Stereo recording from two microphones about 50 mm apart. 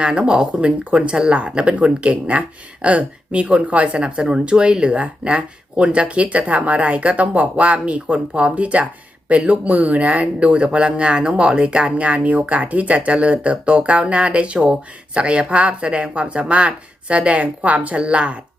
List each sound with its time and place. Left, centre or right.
0.0 s speech: right